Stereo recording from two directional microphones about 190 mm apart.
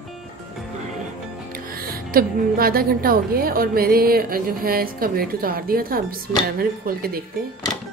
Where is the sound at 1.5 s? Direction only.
50° right (ahead or behind).